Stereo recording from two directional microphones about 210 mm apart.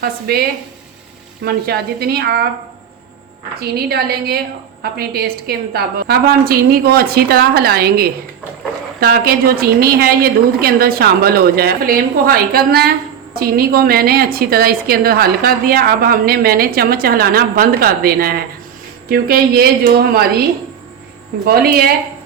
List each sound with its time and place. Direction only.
0.0 s a woman's voice: 45° right (ahead or behind)
1.5 s a woman's voice: 50° right (ahead or behind)
3.6 s a woman's voice: 50° right (ahead or behind)
21.4 s a woman's voice: 45° right (ahead or behind)